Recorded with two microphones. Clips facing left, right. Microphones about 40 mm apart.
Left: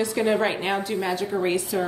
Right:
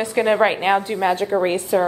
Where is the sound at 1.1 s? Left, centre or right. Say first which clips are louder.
Right 4 dB; right.